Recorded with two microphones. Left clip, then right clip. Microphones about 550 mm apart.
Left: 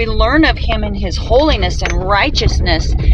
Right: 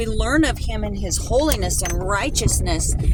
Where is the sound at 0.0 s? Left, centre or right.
Right.